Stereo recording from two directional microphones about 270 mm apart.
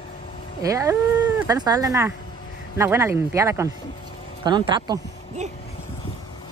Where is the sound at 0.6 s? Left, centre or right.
Centre.